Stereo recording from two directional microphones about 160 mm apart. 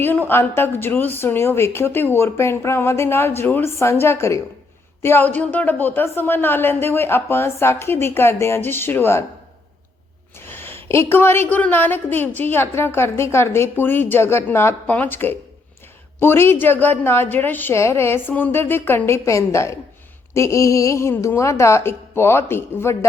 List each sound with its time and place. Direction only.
0.0 s a woman's voice: 15° left (ahead or behind)
10.4 s a woman's voice: 15° left (ahead or behind)